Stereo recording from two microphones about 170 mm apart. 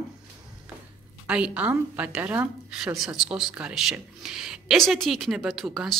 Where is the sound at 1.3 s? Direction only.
5° right (ahead or behind).